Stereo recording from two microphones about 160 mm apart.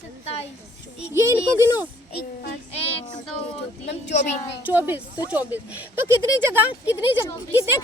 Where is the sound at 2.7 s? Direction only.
35° left (ahead or behind).